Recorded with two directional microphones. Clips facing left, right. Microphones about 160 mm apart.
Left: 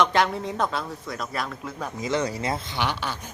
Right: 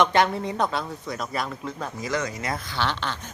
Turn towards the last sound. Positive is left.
turn(degrees=10)  # may be behind; listen again after turning